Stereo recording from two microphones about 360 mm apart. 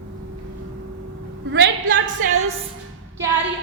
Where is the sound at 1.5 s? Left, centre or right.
Right.